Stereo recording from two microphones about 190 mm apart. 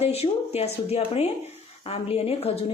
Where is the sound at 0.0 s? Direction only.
35° left (ahead or behind).